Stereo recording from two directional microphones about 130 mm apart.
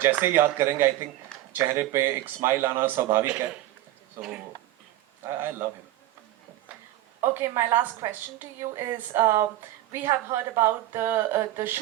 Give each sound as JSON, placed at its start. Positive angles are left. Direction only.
{"t": 0.0, "sound": "a woman's voice", "side_deg": -15}
{"t": 5.2, "sound": "a woman's voice", "side_deg": -20}
{"t": 7.2, "sound": "a woman's voice", "side_deg": -20}